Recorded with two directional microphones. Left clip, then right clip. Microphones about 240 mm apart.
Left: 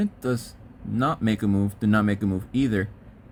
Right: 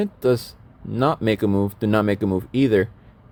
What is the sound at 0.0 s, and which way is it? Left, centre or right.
Speech, right.